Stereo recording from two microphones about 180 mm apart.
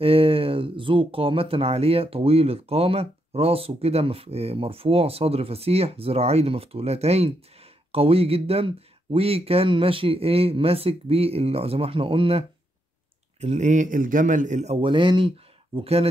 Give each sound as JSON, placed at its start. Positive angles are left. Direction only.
{"t": 0.0, "sound": "speech", "side_deg": -30}